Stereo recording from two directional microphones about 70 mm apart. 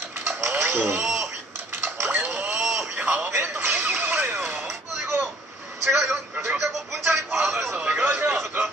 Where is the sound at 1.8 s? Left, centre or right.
Right.